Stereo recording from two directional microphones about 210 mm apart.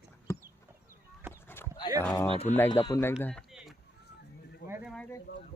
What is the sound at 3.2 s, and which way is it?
Run, 5° left (ahead or behind).